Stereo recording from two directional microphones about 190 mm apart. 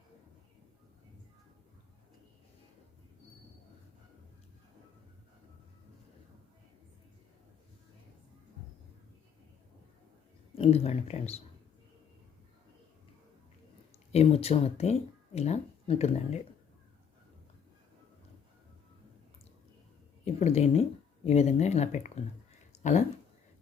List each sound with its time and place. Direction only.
10.5 s speech: 30° left (ahead or behind)
14.1 s speech: 30° left (ahead or behind)
20.2 s speech: 35° left (ahead or behind)